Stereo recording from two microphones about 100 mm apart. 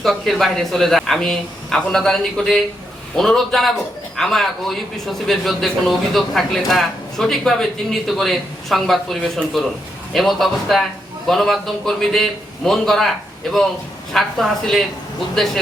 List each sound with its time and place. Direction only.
0.0 s a man's voice: centre (ahead or behind)